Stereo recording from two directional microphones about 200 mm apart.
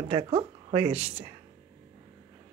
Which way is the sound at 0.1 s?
30° right (ahead or behind).